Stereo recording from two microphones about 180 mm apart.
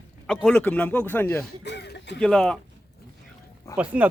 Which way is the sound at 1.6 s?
70° left (ahead or behind).